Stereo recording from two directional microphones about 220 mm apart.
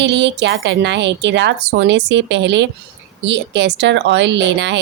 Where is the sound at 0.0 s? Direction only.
50° right (ahead or behind).